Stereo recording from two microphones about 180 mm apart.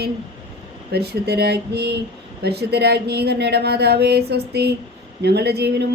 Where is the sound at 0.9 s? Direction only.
65° right (ahead or behind).